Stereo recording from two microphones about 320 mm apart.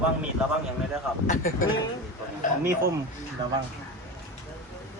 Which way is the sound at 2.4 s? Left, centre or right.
Left.